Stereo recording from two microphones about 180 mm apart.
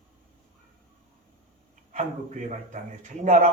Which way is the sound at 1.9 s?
45° right (ahead or behind).